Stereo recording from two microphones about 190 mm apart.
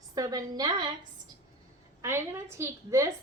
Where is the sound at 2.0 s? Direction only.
15° right (ahead or behind).